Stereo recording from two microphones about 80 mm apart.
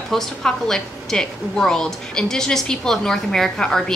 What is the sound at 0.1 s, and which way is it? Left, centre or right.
A woman's voice, centre.